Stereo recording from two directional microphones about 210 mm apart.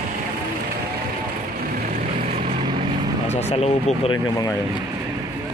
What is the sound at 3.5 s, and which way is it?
Speech, 30° left (ahead or behind).